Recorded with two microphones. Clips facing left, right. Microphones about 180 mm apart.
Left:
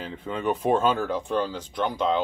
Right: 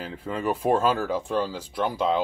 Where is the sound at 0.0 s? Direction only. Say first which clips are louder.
Even; 5° right (ahead or behind).